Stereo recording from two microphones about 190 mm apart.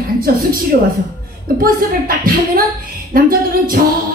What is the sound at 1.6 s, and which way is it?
A woman's voice, 50° right (ahead or behind).